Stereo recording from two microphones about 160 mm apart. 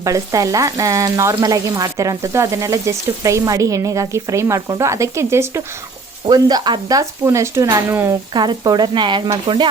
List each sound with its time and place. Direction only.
0.0 s frying: 20° right (ahead or behind)
8.3 s frying: 30° right (ahead or behind)